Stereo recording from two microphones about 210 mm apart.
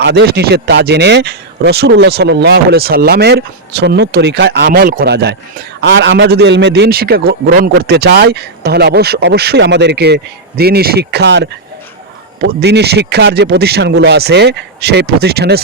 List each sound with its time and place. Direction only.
0.0 s speech: 55° right (ahead or behind)
5.8 s speech: 60° right (ahead or behind)